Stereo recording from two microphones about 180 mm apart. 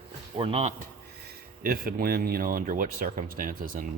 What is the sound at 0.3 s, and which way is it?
Speech, 35° right (ahead or behind).